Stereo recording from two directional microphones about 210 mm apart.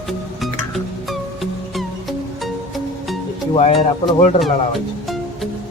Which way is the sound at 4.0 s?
Centre (ahead or behind).